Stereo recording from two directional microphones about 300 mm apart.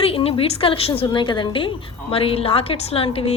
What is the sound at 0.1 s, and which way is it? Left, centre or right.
A woman's voice, centre.